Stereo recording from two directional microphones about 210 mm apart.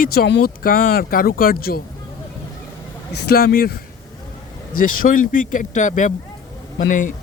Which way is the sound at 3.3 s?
45° left (ahead or behind).